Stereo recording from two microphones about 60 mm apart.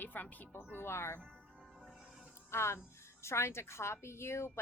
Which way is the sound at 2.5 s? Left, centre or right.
Left.